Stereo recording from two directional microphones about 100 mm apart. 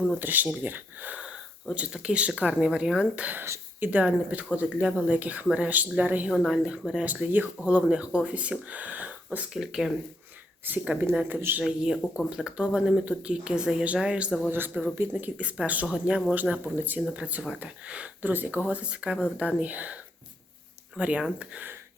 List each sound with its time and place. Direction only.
0.2 s speech: 15° right (ahead or behind)
3.4 s speech: 25° right (ahead or behind)
3.8 s speech: 15° right (ahead or behind)
6.3 s speech: centre (ahead or behind)
10.7 s speech: 20° right (ahead or behind)
11.6 s speech: centre (ahead or behind)
14.5 s speech: 20° right (ahead or behind)